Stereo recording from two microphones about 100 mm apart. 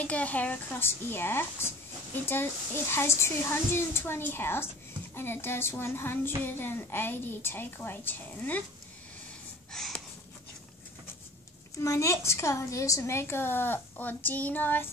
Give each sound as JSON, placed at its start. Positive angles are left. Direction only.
{"t": 0.0, "sound": "speech", "side_deg": 15}
{"t": 2.9, "sound": "child singing", "side_deg": 25}
{"t": 9.7, "sound": "a sound", "side_deg": 5}
{"t": 11.8, "sound": "child singing", "side_deg": 30}